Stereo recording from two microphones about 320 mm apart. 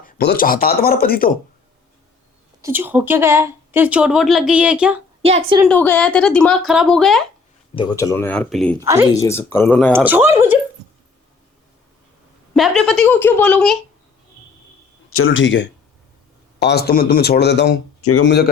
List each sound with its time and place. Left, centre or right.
0.0 s speech: left
2.6 s a woman's voice: centre
5.2 s a woman's voice: centre
5.6 s a woman's voice: centre
7.8 s a woman's voice: centre
8.8 s a woman's voice: centre
9.2 s speech: centre
9.9 s a woman's voice: centre
12.5 s a woman's voice: centre
15.1 s speech: left